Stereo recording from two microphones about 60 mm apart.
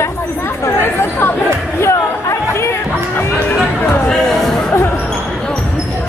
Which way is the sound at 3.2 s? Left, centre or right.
Left.